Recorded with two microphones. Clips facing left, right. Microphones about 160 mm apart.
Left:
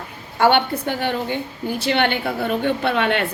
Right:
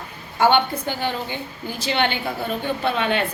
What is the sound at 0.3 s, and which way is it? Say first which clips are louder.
A woman's voice: left 1 dB; 65° left (ahead or behind).